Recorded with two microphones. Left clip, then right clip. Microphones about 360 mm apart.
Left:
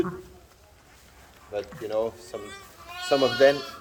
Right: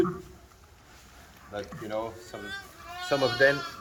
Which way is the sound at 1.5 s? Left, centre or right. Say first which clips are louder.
Left 5 dB; left.